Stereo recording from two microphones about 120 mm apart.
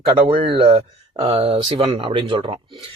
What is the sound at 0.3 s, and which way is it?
A man's voice, 50° right (ahead or behind).